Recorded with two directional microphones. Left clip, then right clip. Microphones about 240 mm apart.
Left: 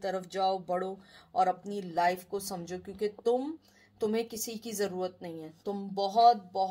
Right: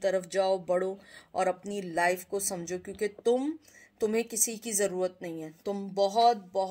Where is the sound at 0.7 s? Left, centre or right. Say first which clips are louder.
Right 4 dB; right.